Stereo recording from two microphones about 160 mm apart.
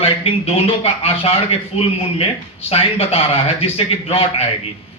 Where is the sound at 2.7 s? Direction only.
40° left (ahead or behind).